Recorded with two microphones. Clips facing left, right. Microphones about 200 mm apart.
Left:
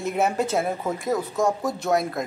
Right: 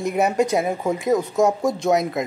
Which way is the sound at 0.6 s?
15° right (ahead or behind).